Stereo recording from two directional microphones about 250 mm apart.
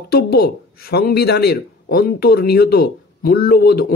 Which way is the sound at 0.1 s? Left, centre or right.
Left.